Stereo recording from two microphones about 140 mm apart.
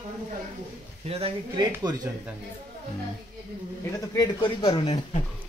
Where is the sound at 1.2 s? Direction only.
30° right (ahead or behind).